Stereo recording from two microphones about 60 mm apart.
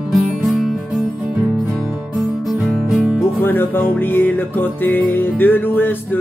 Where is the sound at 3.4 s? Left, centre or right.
Left.